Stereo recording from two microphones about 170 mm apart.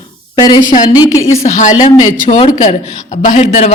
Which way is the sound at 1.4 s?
45° left (ahead or behind).